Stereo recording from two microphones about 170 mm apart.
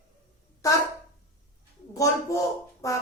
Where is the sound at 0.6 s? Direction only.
20° left (ahead or behind).